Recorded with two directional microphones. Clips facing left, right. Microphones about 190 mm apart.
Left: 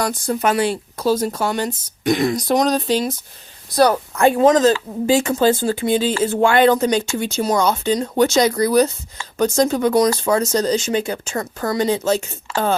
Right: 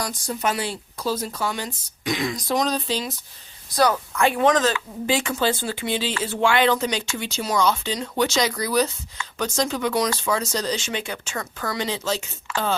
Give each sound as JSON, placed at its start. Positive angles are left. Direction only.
{"t": 0.0, "sound": "speech", "side_deg": 55}
{"t": 1.2, "sound": "speech", "side_deg": 50}
{"t": 3.8, "sound": "speech", "side_deg": 35}